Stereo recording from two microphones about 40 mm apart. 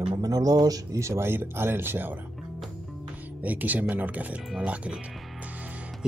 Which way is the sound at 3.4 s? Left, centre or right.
Right.